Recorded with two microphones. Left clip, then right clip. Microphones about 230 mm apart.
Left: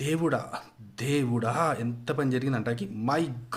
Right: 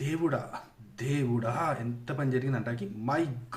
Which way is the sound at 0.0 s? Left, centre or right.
Left.